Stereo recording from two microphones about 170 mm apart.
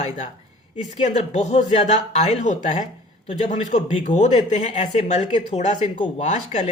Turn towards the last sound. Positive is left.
turn(degrees=40)  # may be behind; listen again after turning